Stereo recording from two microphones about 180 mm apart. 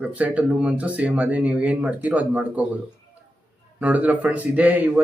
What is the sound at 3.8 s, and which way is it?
Speech, 10° right (ahead or behind).